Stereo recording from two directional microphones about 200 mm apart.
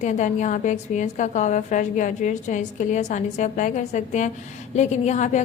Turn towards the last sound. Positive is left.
turn(degrees=35)  # may be behind; listen again after turning